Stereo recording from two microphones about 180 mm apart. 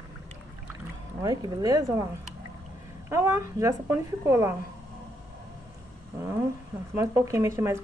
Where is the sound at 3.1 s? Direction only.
15° right (ahead or behind).